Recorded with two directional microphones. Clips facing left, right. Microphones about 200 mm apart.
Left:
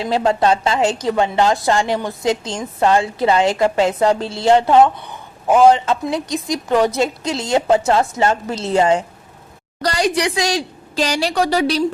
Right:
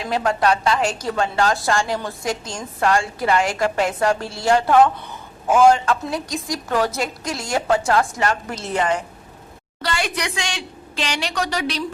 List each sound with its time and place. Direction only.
0.0 s a woman's voice: 25° left (ahead or behind)
9.8 s a woman's voice: 35° left (ahead or behind)